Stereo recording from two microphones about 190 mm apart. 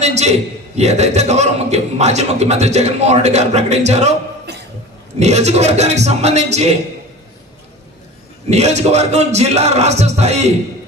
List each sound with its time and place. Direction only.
0.0 s a man's voice: 35° right (ahead or behind)
5.2 s a man's voice: 35° right (ahead or behind)
8.4 s a man's voice: 35° right (ahead or behind)